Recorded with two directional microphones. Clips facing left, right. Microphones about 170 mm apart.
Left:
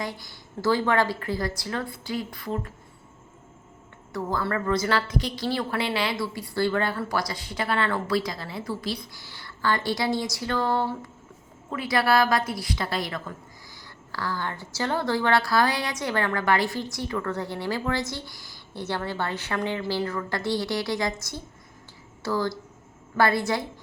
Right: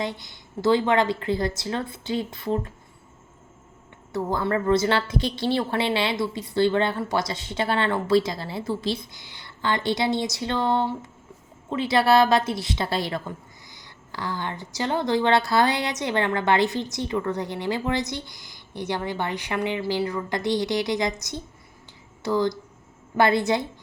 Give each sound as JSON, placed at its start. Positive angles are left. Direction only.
{"t": 0.0, "sound": "a woman's voice", "side_deg": -20}
{"t": 4.1, "sound": "a woman's voice", "side_deg": -25}